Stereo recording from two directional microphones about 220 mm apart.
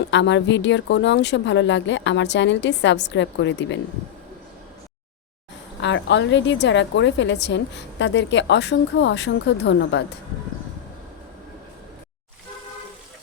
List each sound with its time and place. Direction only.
0.1 s a woman's voice: 55° left (ahead or behind)
5.8 s a woman's voice: 55° left (ahead or behind)